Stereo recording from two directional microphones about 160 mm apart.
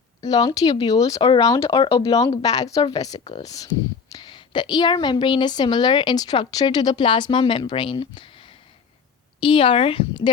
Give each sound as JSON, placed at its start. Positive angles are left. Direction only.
{"t": 0.2, "sound": "a woman's voice", "side_deg": 25}